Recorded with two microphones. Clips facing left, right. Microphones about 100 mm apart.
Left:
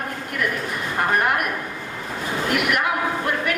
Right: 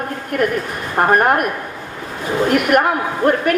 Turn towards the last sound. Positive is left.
turn(degrees=-45)  # may be behind; listen again after turning